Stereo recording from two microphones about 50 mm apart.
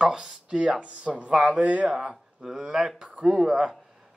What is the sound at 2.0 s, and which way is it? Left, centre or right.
Speech, centre.